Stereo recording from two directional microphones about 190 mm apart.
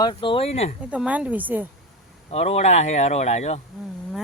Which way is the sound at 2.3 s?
35° left (ahead or behind).